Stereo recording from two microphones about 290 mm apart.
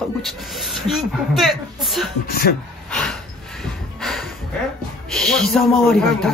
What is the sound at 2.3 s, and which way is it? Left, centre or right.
Speech, left.